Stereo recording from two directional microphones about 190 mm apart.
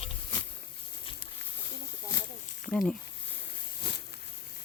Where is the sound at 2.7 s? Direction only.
5° left (ahead or behind).